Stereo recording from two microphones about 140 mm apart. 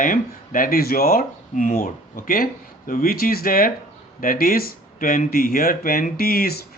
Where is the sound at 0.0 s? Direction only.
75° left (ahead or behind).